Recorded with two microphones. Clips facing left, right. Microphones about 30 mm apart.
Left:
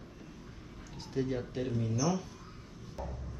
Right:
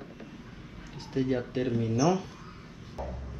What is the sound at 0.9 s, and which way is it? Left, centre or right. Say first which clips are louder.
Speech: right 5 dB; right.